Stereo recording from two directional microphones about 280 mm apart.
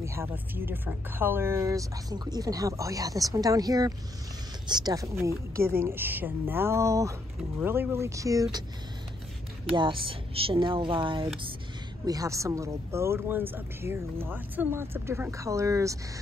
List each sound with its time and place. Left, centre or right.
0.0 s speech: centre
9.7 s speech: centre